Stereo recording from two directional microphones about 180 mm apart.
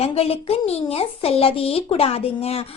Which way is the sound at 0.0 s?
35° left (ahead or behind).